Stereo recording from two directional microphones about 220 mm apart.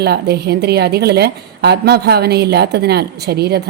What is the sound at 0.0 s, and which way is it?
A woman's voice, 45° right (ahead or behind).